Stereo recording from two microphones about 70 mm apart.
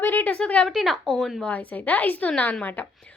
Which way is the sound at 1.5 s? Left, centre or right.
Left.